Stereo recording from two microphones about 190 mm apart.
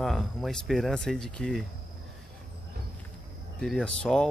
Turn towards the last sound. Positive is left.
turn(degrees=5)  # may be behind; listen again after turning